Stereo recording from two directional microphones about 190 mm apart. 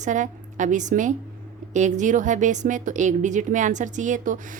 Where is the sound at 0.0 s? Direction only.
40° right (ahead or behind).